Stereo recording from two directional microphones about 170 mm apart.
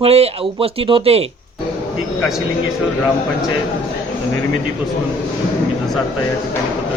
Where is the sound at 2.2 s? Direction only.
Centre (ahead or behind).